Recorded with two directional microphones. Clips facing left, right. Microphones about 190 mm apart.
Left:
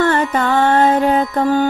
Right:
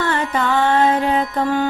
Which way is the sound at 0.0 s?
45° left (ahead or behind).